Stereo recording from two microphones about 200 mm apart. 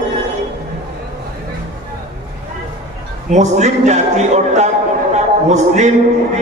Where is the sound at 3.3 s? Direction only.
35° right (ahead or behind).